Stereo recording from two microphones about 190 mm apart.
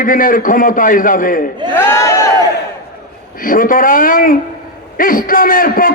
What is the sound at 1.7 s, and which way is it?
Crowd, 15° left (ahead or behind).